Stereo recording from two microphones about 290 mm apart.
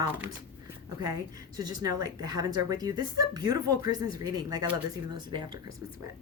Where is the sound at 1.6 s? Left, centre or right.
Centre.